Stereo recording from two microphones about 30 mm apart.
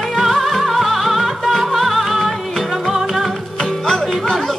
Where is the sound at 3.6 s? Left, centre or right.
Centre.